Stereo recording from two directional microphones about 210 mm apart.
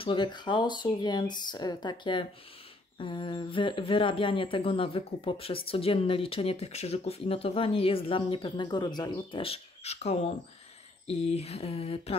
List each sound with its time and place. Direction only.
0.0 s speech: 20° left (ahead or behind)